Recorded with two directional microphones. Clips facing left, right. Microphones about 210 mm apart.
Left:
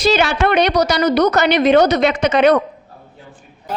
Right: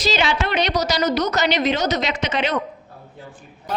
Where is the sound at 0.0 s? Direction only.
55° left (ahead or behind).